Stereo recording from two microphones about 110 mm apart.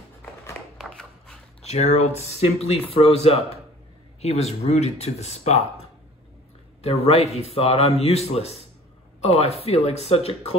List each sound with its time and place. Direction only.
0.7 s a sound: 5° left (ahead or behind)
1.6 s speech: 70° left (ahead or behind)
4.2 s speech: 75° left (ahead or behind)
6.8 s speech: 65° left (ahead or behind)